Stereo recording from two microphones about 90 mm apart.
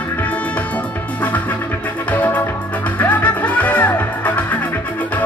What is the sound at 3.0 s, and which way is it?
Music, 20° left (ahead or behind).